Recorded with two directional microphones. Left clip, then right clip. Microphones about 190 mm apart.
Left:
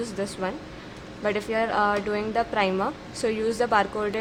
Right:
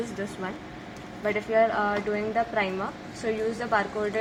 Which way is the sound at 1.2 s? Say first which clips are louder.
Right 2 dB; 60° left (ahead or behind).